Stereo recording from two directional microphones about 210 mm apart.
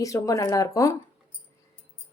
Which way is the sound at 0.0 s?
15° left (ahead or behind).